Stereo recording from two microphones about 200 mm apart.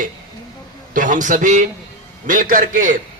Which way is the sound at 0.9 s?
40° right (ahead or behind).